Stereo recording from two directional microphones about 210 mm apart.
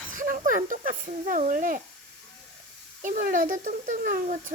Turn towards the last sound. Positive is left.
turn(degrees=-40)  # may be behind; listen again after turning